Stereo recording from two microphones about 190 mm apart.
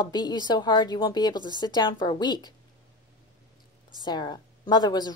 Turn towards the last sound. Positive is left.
turn(degrees=20)  # may be behind; listen again after turning